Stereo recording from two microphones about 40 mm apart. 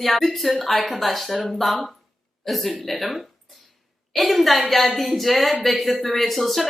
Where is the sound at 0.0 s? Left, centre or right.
Centre.